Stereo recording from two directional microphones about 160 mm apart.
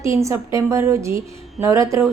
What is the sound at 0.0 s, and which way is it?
A woman's voice, 20° right (ahead or behind).